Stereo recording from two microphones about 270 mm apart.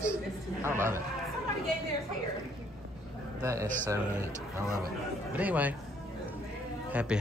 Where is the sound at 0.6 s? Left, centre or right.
Centre.